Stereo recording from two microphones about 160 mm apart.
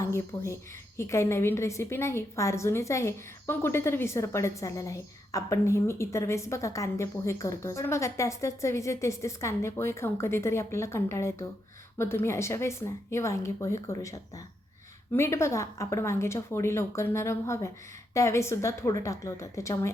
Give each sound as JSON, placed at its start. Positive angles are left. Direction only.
{"t": 0.0, "sound": "a woman's voice", "side_deg": 15}